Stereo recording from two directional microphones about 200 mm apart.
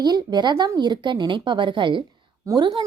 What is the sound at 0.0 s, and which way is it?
A woman's voice, 20° right (ahead or behind).